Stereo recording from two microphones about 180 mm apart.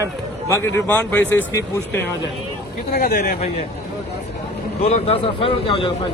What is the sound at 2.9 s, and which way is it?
Speech, 60° left (ahead or behind).